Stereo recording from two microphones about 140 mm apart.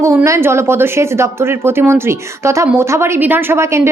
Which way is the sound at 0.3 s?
20° right (ahead or behind).